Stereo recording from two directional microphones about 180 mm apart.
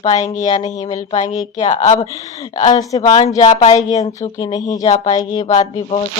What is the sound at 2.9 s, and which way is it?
Speech, 35° left (ahead or behind).